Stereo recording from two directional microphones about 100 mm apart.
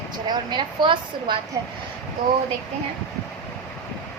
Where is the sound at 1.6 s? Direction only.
45° right (ahead or behind).